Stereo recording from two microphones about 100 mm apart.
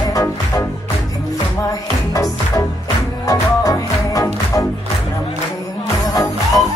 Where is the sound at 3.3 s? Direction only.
35° left (ahead or behind).